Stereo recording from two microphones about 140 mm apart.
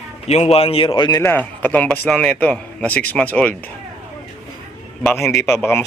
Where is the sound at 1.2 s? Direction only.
15° left (ahead or behind).